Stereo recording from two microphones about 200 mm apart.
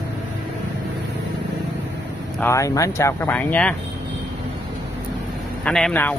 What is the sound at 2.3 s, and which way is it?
Speech, 15° left (ahead or behind).